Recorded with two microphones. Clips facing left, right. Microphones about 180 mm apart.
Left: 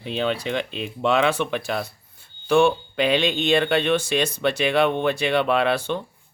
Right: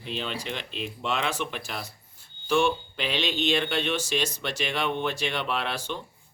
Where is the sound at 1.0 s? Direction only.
60° left (ahead or behind).